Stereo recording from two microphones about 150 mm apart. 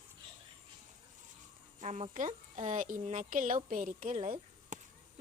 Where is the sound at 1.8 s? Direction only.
55° right (ahead or behind).